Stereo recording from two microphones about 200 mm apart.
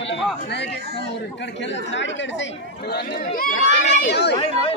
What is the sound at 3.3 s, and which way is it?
Speech, 45° left (ahead or behind).